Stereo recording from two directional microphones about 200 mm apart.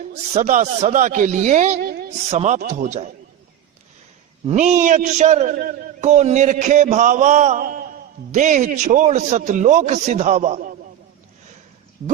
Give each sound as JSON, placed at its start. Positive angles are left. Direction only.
{"t": 0.3, "sound": "a man's voice", "side_deg": -35}
{"t": 1.8, "sound": "a sound", "side_deg": -50}
{"t": 2.3, "sound": "a man's voice", "side_deg": -30}
{"t": 4.4, "sound": "a man's voice", "side_deg": -35}